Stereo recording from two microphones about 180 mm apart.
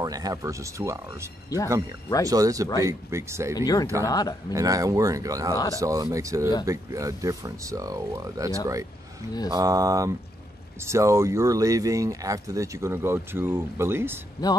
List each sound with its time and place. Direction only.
0.0 s a man's voice: 20° right (ahead or behind)
3.5 s speech: 20° left (ahead or behind)
4.5 s a man's voice: 20° right (ahead or behind)